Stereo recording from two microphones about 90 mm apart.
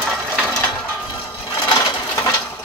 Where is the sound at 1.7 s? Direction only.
50° left (ahead or behind).